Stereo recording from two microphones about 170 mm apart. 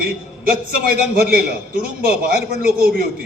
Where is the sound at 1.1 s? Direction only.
60° right (ahead or behind).